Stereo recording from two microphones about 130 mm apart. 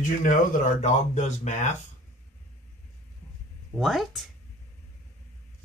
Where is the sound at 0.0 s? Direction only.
80° left.